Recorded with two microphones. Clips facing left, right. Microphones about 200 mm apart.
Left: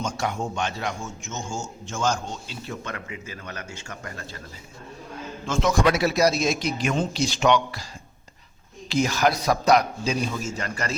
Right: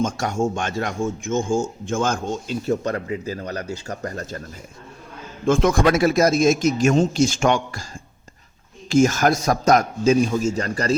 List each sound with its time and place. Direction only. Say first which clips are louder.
0.0 s speech: right 6 dB; 50° right (ahead or behind)
5.5 s speech: right 5 dB; 55° right (ahead or behind)
8.9 s speech: right 6 dB; 45° right (ahead or behind)